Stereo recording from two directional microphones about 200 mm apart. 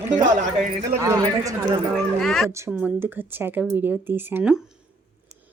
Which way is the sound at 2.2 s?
Centre (ahead or behind).